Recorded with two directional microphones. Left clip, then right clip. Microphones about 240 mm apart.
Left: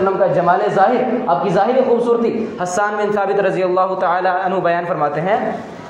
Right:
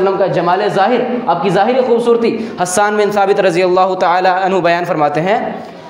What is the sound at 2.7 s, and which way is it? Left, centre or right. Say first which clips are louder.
A man's voice: right 5 dB; right.